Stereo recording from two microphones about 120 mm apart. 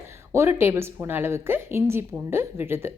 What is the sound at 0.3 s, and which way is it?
A woman's voice, 20° right (ahead or behind).